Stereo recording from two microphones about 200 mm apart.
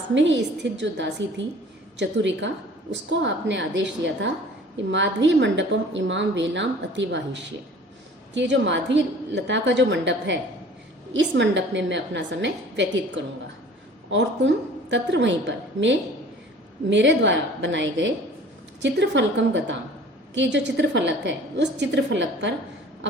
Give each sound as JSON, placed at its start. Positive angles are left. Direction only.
{"t": 0.1, "sound": "a woman's voice", "side_deg": -65}